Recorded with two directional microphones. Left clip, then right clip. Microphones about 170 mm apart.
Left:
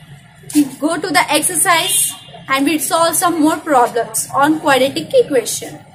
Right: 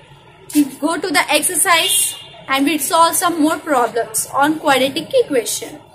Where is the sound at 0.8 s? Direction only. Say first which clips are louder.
Left 3 dB; 15° right (ahead or behind).